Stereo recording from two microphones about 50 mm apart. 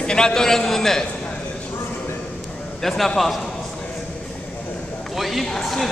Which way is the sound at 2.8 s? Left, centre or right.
Centre.